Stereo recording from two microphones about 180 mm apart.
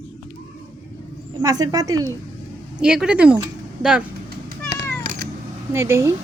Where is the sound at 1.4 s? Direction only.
20° right (ahead or behind).